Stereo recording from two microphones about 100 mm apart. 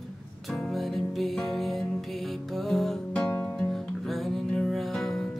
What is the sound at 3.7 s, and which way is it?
Music, centre (ahead or behind).